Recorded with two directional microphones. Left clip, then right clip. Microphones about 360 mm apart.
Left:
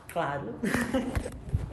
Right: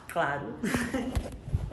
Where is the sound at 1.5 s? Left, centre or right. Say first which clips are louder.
Left 1 dB; centre.